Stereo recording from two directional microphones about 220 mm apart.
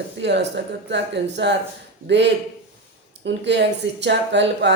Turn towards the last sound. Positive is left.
turn(degrees=-50)  # may be behind; listen again after turning